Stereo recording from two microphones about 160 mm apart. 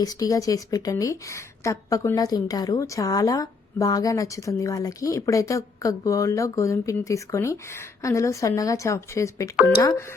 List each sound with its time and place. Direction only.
0.0 s a woman's voice: 20° left (ahead or behind)